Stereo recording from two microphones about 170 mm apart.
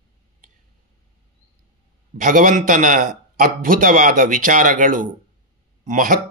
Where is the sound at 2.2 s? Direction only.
50° right (ahead or behind).